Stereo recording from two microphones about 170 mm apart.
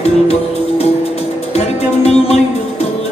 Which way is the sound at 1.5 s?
40° left (ahead or behind).